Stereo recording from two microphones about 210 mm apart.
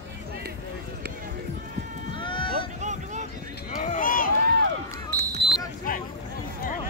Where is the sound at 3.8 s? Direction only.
40° left (ahead or behind).